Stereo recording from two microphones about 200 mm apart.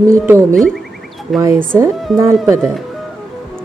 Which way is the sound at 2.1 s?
Centre (ahead or behind).